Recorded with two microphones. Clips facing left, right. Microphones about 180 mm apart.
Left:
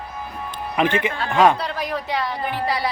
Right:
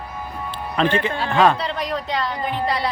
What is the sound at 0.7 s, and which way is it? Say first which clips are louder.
Speech: even; 15° left (ahead or behind).